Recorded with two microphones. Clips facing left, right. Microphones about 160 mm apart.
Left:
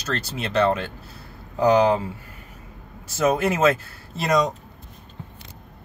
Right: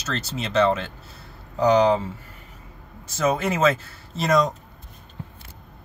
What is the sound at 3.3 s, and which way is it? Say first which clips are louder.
Speech: left 1 dB; centre (ahead or behind).